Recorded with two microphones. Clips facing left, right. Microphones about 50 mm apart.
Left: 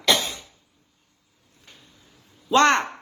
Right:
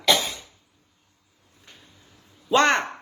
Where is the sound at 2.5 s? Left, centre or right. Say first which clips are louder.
Left 2 dB; centre.